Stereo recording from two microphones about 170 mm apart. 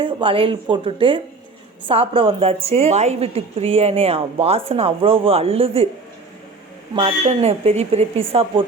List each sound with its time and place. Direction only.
0.0 s a woman's voice: 30° right (ahead or behind)
6.9 s a woman's voice: 35° right (ahead or behind)